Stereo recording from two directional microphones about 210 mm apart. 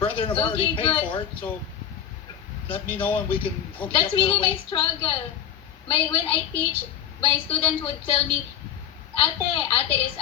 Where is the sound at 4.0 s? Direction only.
25° left (ahead or behind).